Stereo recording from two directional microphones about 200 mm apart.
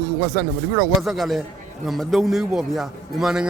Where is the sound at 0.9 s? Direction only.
Centre (ahead or behind).